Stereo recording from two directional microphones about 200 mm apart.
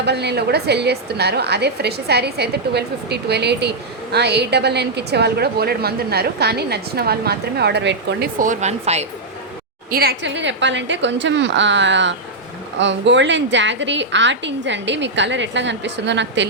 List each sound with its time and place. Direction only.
0.0 s a woman's voice: 55° right (ahead or behind)
8.4 s speech: 35° right (ahead or behind)
9.9 s a woman's voice: 50° right (ahead or behind)